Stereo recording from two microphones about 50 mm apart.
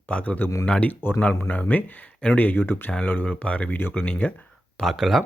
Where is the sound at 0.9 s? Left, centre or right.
Left.